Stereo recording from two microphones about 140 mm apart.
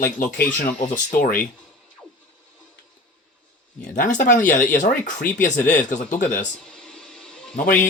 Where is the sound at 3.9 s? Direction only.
65° left (ahead or behind).